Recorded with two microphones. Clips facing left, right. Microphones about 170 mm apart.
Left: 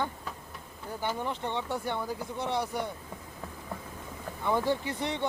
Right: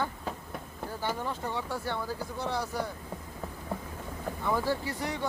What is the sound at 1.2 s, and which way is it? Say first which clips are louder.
Speech: left 1 dB; 20° left (ahead or behind).